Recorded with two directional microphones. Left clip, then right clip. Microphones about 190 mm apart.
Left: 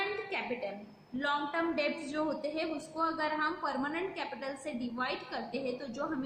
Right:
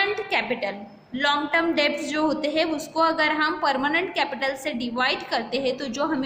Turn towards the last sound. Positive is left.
turn(degrees=-50)  # may be behind; listen again after turning